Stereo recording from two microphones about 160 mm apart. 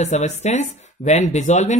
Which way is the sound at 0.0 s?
45° left (ahead or behind).